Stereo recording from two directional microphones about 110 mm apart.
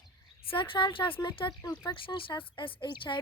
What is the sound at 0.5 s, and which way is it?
Speech, 50° left (ahead or behind).